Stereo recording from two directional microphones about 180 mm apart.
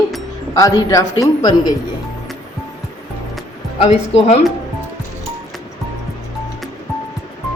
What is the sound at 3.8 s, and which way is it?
Speech, 35° left (ahead or behind).